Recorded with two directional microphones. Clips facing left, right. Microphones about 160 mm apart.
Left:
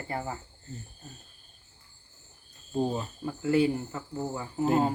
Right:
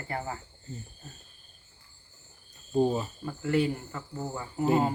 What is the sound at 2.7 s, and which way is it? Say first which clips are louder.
Cricket: right 4 dB; 5° right (ahead or behind).